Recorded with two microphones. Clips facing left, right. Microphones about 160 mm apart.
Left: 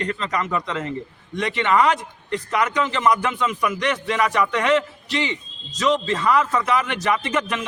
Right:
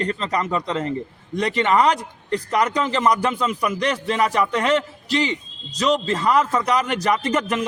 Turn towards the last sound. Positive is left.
turn(degrees=-40)  # may be behind; listen again after turning